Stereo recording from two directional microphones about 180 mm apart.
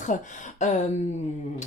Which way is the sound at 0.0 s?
45° left (ahead or behind).